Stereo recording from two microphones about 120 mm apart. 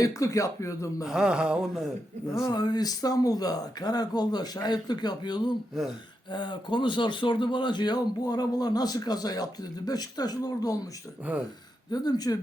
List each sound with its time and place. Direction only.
0.0 s speech: 25° left (ahead or behind)
1.0 s speech: 5° right (ahead or behind)
2.4 s speech: 35° left (ahead or behind)
11.3 s speech: 10° right (ahead or behind)
11.9 s speech: 35° left (ahead or behind)